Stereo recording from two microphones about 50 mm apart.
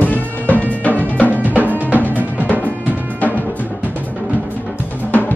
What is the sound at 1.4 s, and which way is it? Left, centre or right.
Music, right.